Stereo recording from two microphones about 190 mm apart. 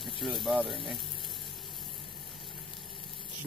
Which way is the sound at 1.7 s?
25° left (ahead or behind).